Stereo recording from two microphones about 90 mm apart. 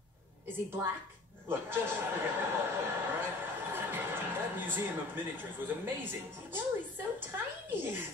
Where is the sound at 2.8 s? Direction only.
25° right (ahead or behind).